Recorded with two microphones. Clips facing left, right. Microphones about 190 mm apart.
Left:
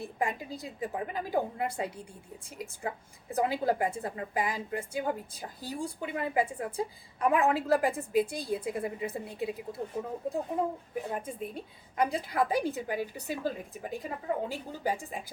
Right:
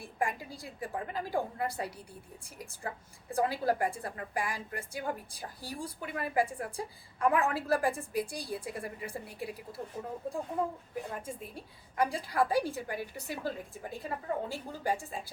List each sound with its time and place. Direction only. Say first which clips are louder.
0.0 s a woman's voice: left 2 dB; 20° left (ahead or behind)
11.1 s a woman's voice: left 5 dB; 20° left (ahead or behind)